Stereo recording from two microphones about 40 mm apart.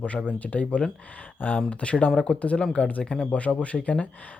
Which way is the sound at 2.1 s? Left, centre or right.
Centre.